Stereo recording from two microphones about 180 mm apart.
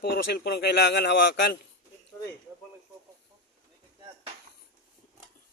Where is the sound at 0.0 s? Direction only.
60° left (ahead or behind); by 1.5 s 80° left.